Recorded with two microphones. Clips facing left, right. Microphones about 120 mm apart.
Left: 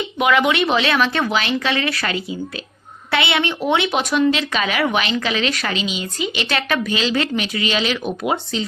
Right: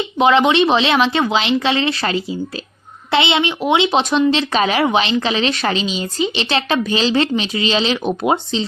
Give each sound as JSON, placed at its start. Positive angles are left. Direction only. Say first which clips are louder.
{"t": 0.2, "sound": "speech", "louder": "right 4 dB", "side_deg": -30}